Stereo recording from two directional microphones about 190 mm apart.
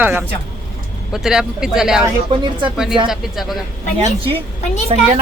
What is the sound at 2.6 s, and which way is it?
Speech, 5° right (ahead or behind).